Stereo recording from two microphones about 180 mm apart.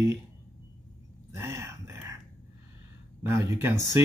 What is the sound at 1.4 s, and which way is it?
Speech, 15° right (ahead or behind).